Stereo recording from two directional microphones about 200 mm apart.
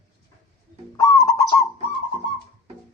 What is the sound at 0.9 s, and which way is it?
Owl, 15° left (ahead or behind).